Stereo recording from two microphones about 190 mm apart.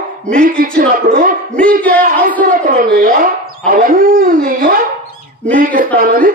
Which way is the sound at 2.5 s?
45° right (ahead or behind).